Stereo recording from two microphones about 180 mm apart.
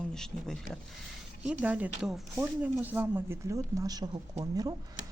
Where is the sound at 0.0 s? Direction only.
5° left (ahead or behind).